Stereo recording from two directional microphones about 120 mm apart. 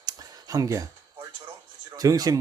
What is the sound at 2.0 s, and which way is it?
Speech, 30° right (ahead or behind).